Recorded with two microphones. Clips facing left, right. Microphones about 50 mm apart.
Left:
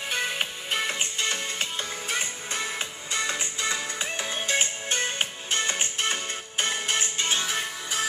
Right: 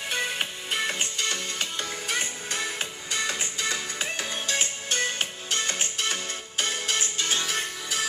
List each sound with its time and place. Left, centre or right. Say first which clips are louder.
0.1 s music: even; centre
0.9 s music: left 1 dB; left
7.4 s music: even; centre